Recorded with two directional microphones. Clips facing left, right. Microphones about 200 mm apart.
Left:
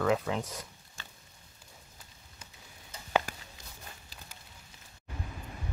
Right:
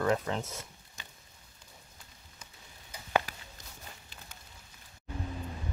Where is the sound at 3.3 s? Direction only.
50° left (ahead or behind).